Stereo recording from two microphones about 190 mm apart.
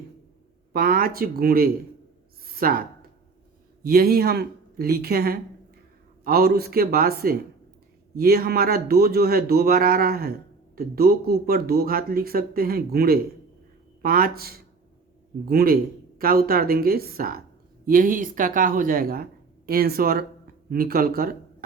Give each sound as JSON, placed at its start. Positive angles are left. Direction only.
{"t": 0.7, "sound": "speech", "side_deg": -50}
{"t": 2.5, "sound": "a sound", "side_deg": -50}
{"t": 3.8, "sound": "speech", "side_deg": -55}